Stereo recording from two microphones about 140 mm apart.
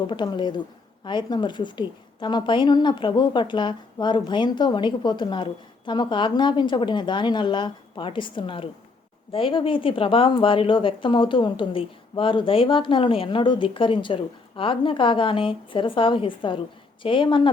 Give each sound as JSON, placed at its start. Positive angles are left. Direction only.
{"t": 0.1, "sound": "a woman's voice", "side_deg": 35}